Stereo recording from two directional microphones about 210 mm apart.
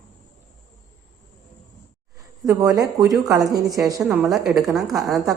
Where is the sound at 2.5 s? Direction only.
15° right (ahead or behind).